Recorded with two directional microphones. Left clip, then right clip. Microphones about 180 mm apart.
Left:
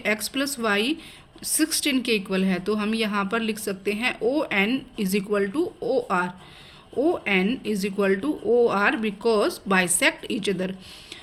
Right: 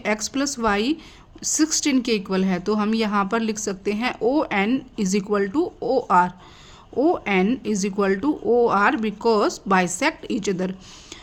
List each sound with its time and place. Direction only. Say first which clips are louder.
0.0 s speech: right 1 dB; 45° right (ahead or behind)